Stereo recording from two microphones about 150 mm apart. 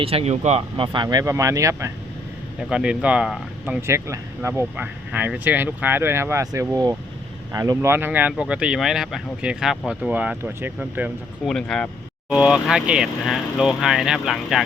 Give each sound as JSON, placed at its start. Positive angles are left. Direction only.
{"t": 0.0, "sound": "speech", "side_deg": -40}
{"t": 0.9, "sound": "speech", "side_deg": -25}
{"t": 2.6, "sound": "speech", "side_deg": -5}
{"t": 3.8, "sound": "speech", "side_deg": -20}
{"t": 11.4, "sound": "speech", "side_deg": 5}